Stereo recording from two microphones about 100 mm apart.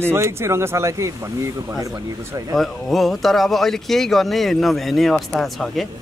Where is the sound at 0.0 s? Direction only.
25° right (ahead or behind).